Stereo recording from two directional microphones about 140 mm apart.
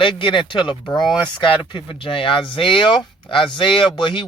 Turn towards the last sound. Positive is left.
turn(degrees=35)  # may be behind; listen again after turning